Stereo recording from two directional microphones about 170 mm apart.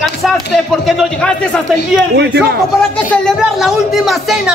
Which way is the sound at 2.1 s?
85° right.